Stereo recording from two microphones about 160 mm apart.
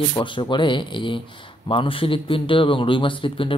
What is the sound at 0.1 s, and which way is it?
A man's voice, 30° left (ahead or behind).